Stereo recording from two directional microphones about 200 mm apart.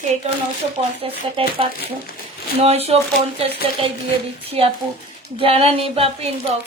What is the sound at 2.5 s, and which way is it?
Speech, 30° right (ahead or behind).